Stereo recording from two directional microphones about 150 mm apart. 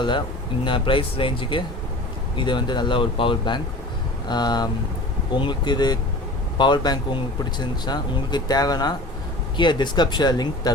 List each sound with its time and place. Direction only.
0.6 s speech: 35° left (ahead or behind)